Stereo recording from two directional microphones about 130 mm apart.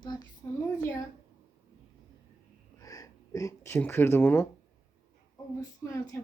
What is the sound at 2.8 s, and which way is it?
Speech, 25° left (ahead or behind).